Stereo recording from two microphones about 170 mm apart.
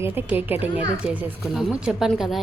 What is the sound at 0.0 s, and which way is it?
Speech, 10° right (ahead or behind).